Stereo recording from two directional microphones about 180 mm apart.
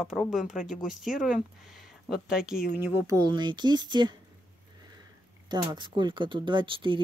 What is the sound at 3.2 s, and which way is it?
Speech, 25° right (ahead or behind).